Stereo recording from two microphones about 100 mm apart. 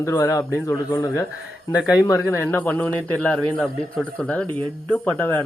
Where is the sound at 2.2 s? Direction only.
20° left (ahead or behind).